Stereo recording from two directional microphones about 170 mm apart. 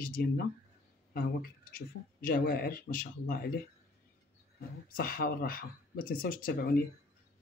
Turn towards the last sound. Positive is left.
turn(degrees=60)  # may be behind; listen again after turning